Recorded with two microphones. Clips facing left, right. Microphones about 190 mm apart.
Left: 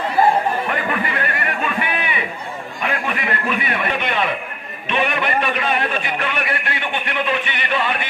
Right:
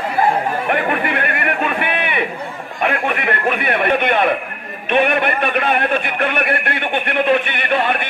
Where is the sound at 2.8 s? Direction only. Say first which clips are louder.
Right 5 dB; 60° right (ahead or behind).